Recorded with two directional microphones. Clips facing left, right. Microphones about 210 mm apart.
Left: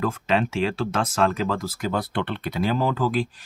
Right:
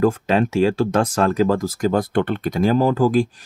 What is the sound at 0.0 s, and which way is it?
Speech, 40° right (ahead or behind).